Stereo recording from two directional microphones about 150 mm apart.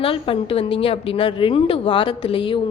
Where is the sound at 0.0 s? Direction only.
35° left (ahead or behind).